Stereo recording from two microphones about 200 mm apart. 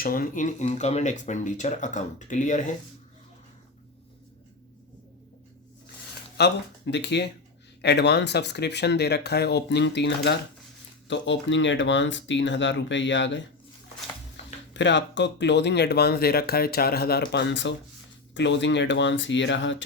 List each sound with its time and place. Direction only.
0.0 s speech: 45° left (ahead or behind)
6.3 s speech: 55° left (ahead or behind)
14.7 s speech: 60° left (ahead or behind)